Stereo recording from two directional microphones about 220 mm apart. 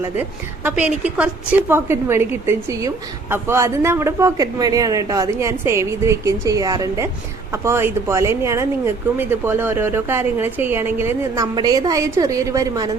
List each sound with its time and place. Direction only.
0.6 s a woman's voice: 5° right (ahead or behind)